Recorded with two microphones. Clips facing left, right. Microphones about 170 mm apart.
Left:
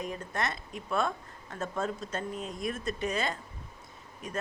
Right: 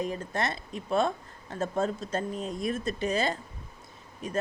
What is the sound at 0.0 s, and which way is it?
A woman's voice, 30° right (ahead or behind).